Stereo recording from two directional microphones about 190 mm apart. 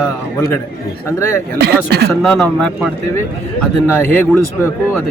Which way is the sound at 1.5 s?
60° right (ahead or behind).